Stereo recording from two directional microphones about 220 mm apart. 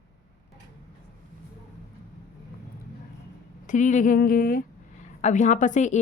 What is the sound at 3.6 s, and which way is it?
Speech, 35° left (ahead or behind).